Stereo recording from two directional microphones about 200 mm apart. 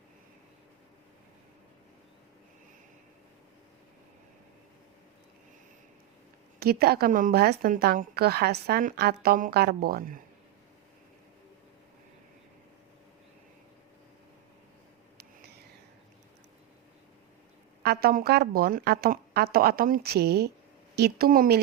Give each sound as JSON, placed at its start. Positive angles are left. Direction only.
{"t": 6.6, "sound": "a woman's voice", "side_deg": -50}
{"t": 17.8, "sound": "a woman's voice", "side_deg": -50}